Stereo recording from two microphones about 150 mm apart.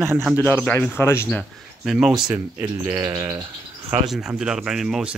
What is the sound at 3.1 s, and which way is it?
Bird, 20° right (ahead or behind).